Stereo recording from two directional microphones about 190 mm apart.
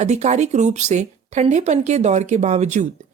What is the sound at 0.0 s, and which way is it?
Speech, 35° right (ahead or behind).